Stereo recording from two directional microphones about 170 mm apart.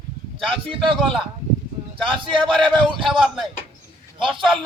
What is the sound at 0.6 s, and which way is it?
Speech, 30° right (ahead or behind).